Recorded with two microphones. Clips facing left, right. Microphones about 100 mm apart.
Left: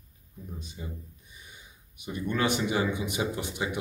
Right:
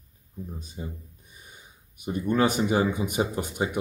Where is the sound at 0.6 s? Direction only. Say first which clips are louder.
Right 4 dB; 40° right (ahead or behind).